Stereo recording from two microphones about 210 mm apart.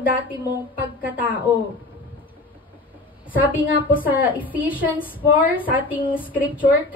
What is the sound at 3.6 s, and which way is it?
Speech, 45° left (ahead or behind).